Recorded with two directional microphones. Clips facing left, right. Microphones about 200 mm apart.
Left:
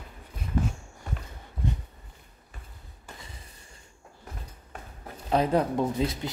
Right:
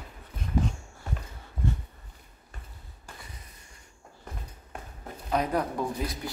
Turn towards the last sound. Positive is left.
turn(degrees=25)  # may be behind; listen again after turning